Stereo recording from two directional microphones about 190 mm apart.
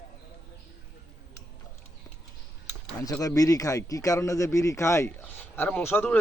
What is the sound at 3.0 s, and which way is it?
A man's voice, 20° left (ahead or behind).